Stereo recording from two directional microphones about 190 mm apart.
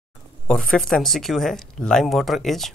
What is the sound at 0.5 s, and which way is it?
Speech, centre (ahead or behind).